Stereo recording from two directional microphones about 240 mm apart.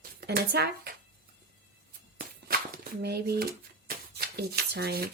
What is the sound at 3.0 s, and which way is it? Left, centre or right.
Speech, right.